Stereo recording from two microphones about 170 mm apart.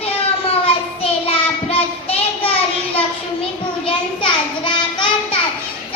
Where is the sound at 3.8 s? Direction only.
30° left (ahead or behind).